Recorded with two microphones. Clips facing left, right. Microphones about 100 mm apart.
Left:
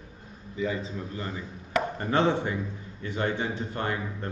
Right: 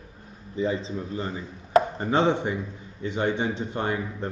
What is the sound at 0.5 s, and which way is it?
Chopping, 30° right (ahead or behind).